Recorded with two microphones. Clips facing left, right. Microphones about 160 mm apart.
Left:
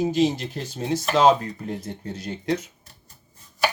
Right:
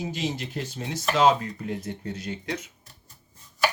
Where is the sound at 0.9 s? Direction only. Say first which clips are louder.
Left 3 dB; 40° left (ahead or behind).